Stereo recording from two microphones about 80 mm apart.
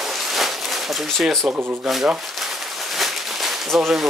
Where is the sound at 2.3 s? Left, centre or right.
Centre.